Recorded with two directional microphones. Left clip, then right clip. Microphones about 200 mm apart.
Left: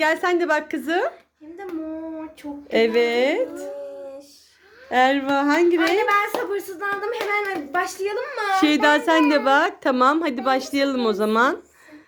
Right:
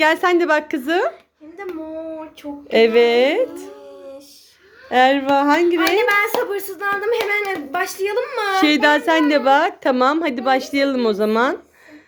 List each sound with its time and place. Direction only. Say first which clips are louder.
0.0 s a woman's voice: right 5 dB; 15° right (ahead or behind)
2.6 s a woman's voice: right 5 dB; 10° right (ahead or behind)
4.9 s a woman's voice: right 4 dB; 5° right (ahead or behind)
6.0 s speech: right 3 dB; 50° right (ahead or behind)
8.6 s speech: right 3 dB; 5° right (ahead or behind)